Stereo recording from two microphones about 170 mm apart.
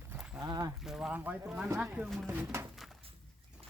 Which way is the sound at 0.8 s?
Centre (ahead or behind).